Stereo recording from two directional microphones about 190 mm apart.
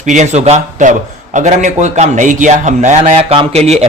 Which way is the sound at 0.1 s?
35° right (ahead or behind).